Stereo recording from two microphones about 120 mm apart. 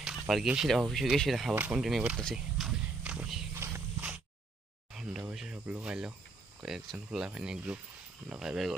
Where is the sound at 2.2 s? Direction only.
Centre (ahead or behind).